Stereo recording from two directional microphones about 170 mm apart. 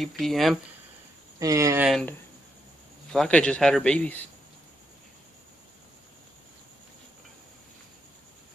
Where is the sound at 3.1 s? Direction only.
5° left (ahead or behind).